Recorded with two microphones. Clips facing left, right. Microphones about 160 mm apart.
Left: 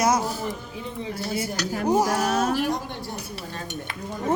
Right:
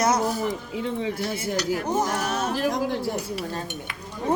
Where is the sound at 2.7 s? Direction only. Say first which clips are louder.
Right 6 dB; 90° right.